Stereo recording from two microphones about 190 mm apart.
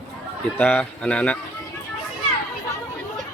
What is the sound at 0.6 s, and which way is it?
Speech, 10° left (ahead or behind).